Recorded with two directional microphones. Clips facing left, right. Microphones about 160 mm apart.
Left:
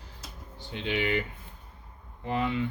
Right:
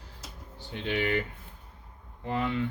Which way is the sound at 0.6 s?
15° left (ahead or behind).